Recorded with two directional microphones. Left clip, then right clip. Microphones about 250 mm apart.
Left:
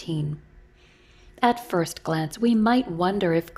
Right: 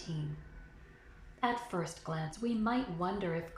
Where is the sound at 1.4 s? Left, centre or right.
Left.